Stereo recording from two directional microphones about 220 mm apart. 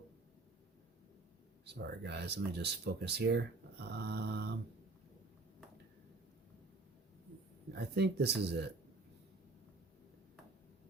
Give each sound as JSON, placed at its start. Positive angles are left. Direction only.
{"t": 1.6, "sound": "speech", "side_deg": -50}
{"t": 7.7, "sound": "speech", "side_deg": -50}